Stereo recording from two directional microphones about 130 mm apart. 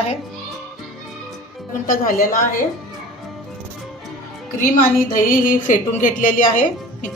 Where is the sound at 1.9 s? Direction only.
90° left.